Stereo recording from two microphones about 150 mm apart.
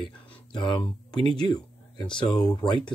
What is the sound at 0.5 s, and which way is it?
Speech, 30° left (ahead or behind).